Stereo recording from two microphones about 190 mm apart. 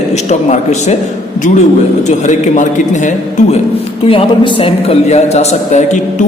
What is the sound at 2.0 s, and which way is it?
A man's voice, 40° left (ahead or behind).